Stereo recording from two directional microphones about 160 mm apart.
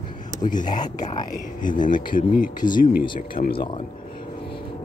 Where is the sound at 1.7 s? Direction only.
30° left (ahead or behind).